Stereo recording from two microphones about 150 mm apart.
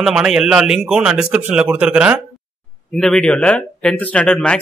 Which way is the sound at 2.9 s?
5° left (ahead or behind).